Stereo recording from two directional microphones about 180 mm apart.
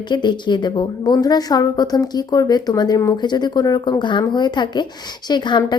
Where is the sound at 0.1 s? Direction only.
25° left (ahead or behind).